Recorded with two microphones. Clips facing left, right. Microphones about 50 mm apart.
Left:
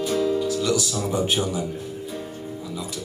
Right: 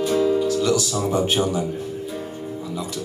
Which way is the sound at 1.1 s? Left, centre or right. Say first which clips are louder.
Right 2 dB; right.